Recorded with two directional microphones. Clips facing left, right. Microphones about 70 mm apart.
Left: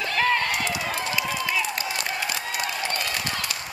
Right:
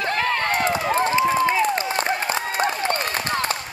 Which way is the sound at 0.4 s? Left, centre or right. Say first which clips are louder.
Right 5 dB; right.